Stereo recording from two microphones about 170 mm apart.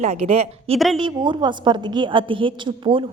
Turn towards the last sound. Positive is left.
turn(degrees=-30)  # may be behind; listen again after turning